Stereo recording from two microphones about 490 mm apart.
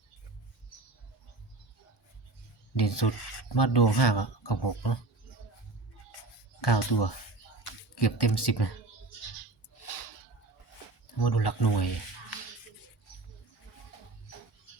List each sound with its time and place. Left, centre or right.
2.7 s speech: left
6.6 s speech: left
9.7 s a sound: left
11.2 s speech: left